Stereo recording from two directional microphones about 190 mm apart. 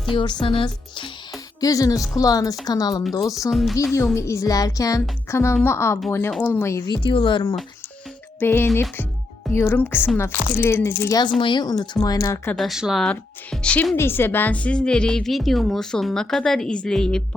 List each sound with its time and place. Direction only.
0.1 s speech: 25° left (ahead or behind)
3.5 s a woman's voice: centre (ahead or behind)
4.1 s speech: 15° left (ahead or behind)
7.0 s speech: 25° left (ahead or behind)
8.4 s speech: 10° left (ahead or behind)
12.5 s a woman's voice: centre (ahead or behind)